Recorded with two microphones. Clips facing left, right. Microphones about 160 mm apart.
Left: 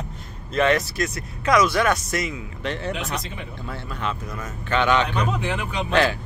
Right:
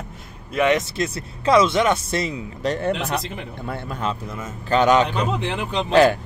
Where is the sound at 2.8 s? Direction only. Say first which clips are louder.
Right 5 dB; 55° right (ahead or behind).